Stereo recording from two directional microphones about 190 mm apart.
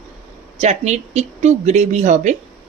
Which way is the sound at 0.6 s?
35° right (ahead or behind).